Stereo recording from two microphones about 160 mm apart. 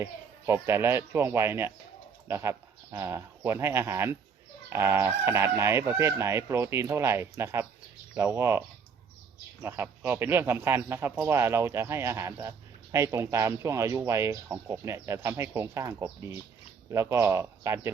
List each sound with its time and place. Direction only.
0.0 s speech: 15° right (ahead or behind)